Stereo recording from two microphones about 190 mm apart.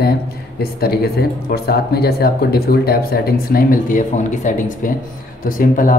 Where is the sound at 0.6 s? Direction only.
55° left (ahead or behind).